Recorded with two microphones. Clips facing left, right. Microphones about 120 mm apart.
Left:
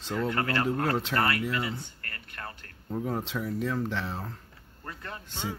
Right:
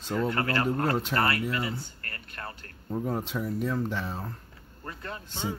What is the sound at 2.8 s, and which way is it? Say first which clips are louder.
Speech: right 1 dB; 5° right (ahead or behind).